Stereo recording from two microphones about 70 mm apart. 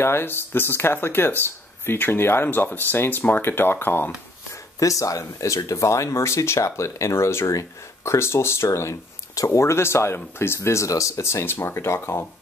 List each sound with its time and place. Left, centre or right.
0.0 s speech: left
4.7 s speech: left